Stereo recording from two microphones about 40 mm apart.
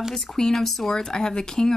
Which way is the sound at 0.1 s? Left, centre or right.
Centre.